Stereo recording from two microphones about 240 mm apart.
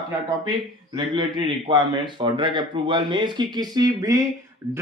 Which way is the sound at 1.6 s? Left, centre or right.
Centre.